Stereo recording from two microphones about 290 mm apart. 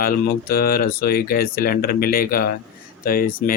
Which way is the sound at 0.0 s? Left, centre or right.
Left.